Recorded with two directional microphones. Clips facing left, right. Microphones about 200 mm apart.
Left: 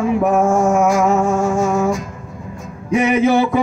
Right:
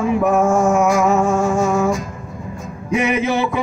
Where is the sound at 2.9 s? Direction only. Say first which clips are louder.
Left 4 dB; 45° left (ahead or behind).